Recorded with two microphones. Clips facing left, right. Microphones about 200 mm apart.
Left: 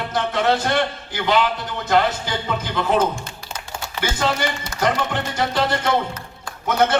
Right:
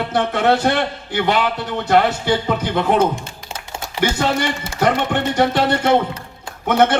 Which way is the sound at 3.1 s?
25° right (ahead or behind).